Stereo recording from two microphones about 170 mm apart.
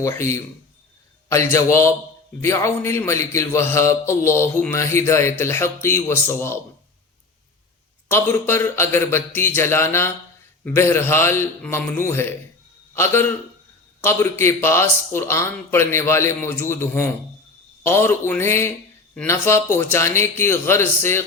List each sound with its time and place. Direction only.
0.0 s a man's voice: 15° left (ahead or behind)
8.0 s a man's voice: 15° left (ahead or behind)